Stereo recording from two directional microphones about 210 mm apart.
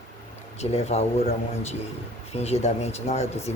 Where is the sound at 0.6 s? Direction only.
30° left (ahead or behind).